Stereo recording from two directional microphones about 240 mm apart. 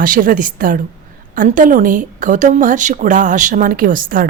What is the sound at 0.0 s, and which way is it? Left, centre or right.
A woman's voice, right.